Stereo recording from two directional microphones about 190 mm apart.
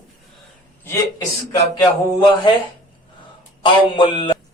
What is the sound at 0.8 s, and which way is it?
Speech, 15° left (ahead or behind).